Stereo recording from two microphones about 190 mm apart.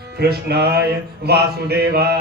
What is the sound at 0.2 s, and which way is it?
Music, 55° right (ahead or behind).